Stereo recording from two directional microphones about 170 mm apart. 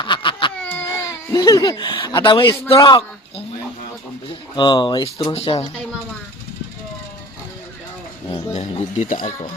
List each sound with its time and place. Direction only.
0.0 s laughter: 30° left (ahead or behind)
0.8 s speech: 15° left (ahead or behind)
4.5 s speech: 25° left (ahead or behind)
8.5 s speech: 45° left (ahead or behind)